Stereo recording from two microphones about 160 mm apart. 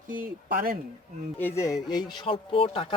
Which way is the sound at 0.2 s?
65° right (ahead or behind).